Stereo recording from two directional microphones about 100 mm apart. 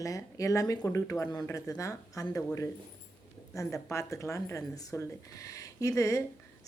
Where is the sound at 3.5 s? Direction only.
30° left (ahead or behind).